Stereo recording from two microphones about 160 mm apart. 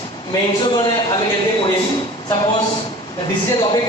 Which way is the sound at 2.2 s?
25° left (ahead or behind).